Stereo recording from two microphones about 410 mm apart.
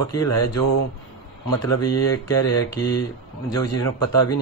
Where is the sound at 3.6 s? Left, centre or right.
Left.